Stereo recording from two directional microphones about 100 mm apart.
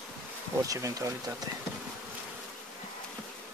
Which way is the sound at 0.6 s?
35° right (ahead or behind).